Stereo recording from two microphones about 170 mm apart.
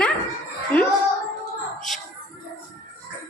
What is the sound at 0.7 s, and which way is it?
Child singing, 10° left (ahead or behind).